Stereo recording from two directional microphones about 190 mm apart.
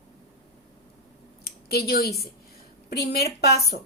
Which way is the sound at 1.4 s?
55° left (ahead or behind).